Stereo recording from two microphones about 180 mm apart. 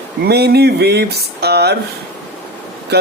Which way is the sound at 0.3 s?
65° right (ahead or behind).